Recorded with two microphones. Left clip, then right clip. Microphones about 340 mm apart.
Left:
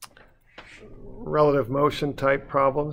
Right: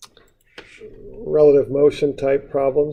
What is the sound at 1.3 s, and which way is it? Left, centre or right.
Speech, left.